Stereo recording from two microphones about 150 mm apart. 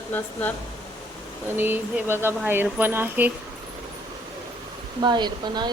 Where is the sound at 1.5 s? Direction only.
15° right (ahead or behind).